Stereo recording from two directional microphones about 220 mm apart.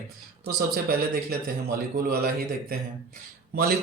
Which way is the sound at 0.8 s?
45° right (ahead or behind).